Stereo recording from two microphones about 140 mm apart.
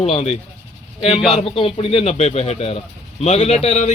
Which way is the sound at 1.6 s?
40° left (ahead or behind).